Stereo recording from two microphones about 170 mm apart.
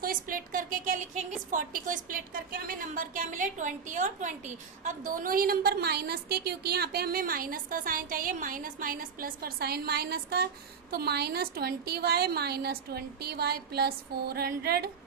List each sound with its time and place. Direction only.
0.0 s a woman's voice: 55° right (ahead or behind)